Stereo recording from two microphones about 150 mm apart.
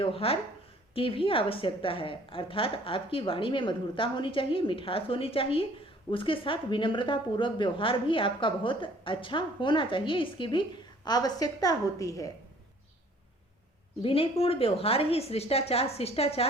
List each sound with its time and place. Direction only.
0.0 s a woman's voice: 40° left (ahead or behind); by 12.3 s 20° left (ahead or behind)
14.0 s a woman's voice: 40° left (ahead or behind)